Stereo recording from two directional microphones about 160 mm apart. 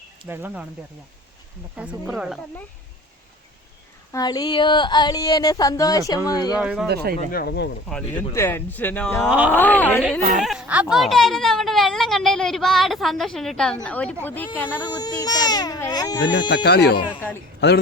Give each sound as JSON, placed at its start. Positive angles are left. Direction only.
{"t": 0.3, "sound": "speech", "side_deg": -10}
{"t": 1.7, "sound": "a woman's voice", "side_deg": -5}
{"t": 4.1, "sound": "speech", "side_deg": 25}
{"t": 6.6, "sound": "a woman's voice", "side_deg": -5}
{"t": 6.8, "sound": "speech", "side_deg": -85}
{"t": 7.3, "sound": "speech", "side_deg": 70}
{"t": 8.3, "sound": "speech", "side_deg": 15}
{"t": 9.3, "sound": "speech", "side_deg": -10}
{"t": 9.6, "sound": "speech", "side_deg": 10}
{"t": 10.2, "sound": "speech", "side_deg": -55}
{"t": 10.4, "sound": "a woman's voice", "side_deg": -5}
{"t": 14.9, "sound": "speech", "side_deg": 25}
{"t": 16.6, "sound": "speech", "side_deg": 90}